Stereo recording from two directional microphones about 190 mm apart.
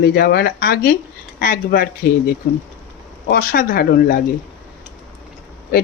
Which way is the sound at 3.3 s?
50° left (ahead or behind).